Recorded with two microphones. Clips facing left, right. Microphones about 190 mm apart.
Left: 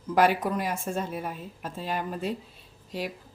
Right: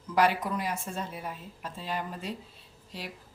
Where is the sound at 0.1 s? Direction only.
50° left (ahead or behind).